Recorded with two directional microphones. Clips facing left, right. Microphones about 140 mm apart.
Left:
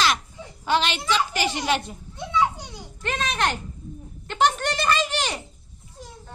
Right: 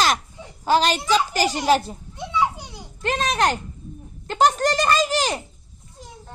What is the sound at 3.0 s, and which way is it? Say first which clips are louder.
A child's voice: right 4 dB; 35° right (ahead or behind).